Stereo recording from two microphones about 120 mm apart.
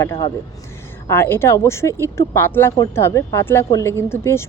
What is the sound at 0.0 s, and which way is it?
Speech, 20° left (ahead or behind).